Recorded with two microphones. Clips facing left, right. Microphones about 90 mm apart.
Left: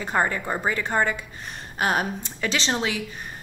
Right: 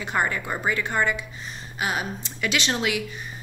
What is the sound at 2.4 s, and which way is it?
Speech, 30° left (ahead or behind).